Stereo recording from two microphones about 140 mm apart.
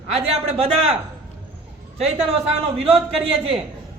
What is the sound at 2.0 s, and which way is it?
Speech, 45° right (ahead or behind).